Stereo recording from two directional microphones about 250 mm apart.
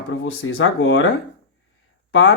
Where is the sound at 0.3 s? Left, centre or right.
Left.